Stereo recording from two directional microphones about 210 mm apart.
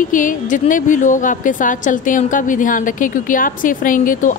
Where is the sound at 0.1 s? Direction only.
40° left (ahead or behind).